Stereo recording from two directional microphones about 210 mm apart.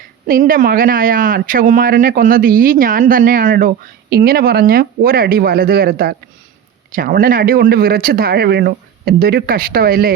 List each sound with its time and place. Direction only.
0.3 s speech: 40° right (ahead or behind)